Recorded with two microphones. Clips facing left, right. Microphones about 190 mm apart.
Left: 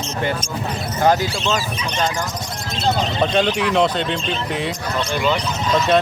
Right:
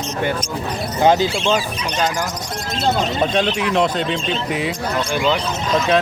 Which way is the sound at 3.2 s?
Centre (ahead or behind).